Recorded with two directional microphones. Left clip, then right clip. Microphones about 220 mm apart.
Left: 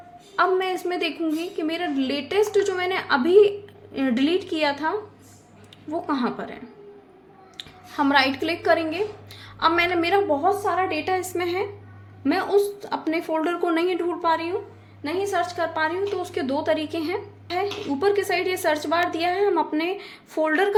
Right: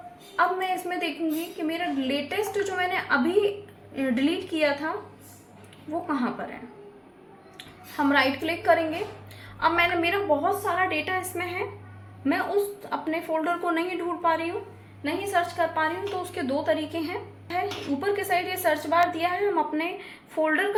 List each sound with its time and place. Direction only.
0.3 s a woman's voice: 55° left (ahead or behind)
6.1 s a woman's voice: 55° left (ahead or behind)